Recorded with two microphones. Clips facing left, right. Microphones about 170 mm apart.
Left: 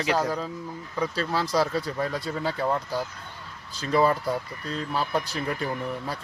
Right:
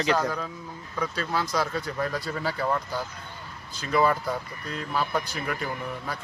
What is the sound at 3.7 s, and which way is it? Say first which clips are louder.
Speech: left 1 dB; 30° left (ahead or behind).